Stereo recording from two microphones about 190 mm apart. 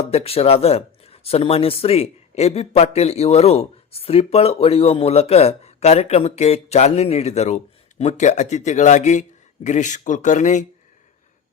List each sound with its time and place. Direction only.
0.0 s speech: 30° left (ahead or behind)